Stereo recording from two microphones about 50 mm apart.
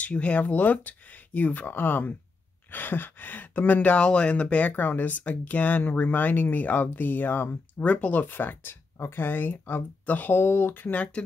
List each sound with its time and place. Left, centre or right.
0.0 s speech: left
7.8 s speech: left
8.3 s speech: left
10.9 s speech: left